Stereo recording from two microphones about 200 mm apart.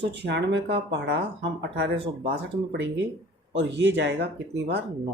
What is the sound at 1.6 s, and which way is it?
Speech, 55° right (ahead or behind).